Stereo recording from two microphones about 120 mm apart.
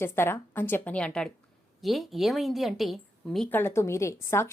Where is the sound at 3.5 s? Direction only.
20° left (ahead or behind).